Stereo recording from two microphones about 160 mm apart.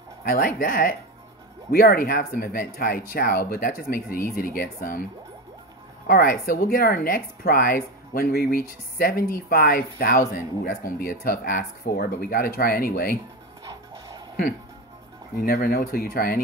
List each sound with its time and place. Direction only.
0.2 s speech: 60° left (ahead or behind)
6.0 s speech: 65° left (ahead or behind)
13.7 s music: 20° right (ahead or behind)
15.4 s speech: 65° left (ahead or behind)